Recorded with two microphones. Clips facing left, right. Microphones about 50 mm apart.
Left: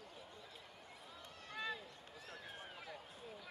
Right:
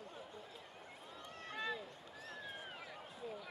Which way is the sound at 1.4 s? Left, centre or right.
Right.